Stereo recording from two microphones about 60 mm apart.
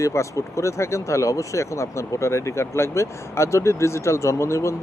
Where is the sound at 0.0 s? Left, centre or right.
Left.